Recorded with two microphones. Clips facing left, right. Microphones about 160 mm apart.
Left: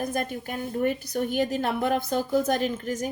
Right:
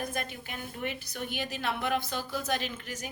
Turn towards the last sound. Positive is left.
turn(degrees=45)  # may be behind; listen again after turning